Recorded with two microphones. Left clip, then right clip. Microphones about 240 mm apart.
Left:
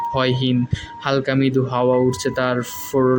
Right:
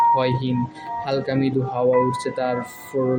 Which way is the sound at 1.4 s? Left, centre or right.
Left.